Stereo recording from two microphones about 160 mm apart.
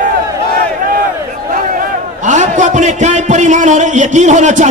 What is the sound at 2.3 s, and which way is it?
A man's voice, 50° right (ahead or behind).